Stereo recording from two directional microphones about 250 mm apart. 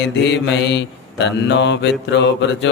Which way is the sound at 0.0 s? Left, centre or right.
Left.